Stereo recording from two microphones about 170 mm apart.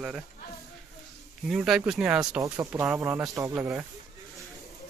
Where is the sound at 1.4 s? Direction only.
Centre (ahead or behind).